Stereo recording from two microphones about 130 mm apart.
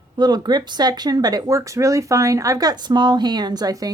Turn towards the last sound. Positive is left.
turn(degrees=-30)  # may be behind; listen again after turning